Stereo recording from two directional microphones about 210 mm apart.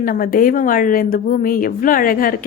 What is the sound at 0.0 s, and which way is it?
A woman's voice, 45° left (ahead or behind).